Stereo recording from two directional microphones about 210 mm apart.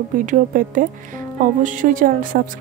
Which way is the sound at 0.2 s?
40° right (ahead or behind).